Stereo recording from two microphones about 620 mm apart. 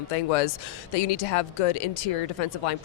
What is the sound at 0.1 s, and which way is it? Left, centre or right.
Speech, left.